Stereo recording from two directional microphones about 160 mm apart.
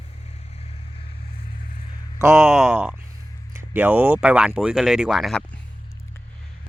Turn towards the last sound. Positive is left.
turn(degrees=5)  # may be behind; listen again after turning